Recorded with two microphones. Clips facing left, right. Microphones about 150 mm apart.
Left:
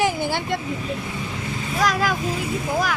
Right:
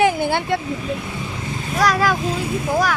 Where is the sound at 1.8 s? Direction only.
80° right.